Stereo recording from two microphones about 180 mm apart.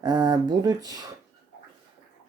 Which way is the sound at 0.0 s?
25° right (ahead or behind).